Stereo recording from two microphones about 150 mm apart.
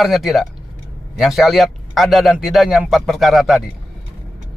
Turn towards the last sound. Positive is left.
turn(degrees=0)  # may be behind; listen again after turning